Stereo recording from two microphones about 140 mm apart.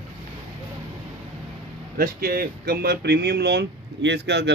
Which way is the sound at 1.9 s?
90° right.